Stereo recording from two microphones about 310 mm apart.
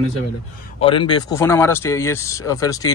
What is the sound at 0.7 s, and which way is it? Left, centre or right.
Speech, centre.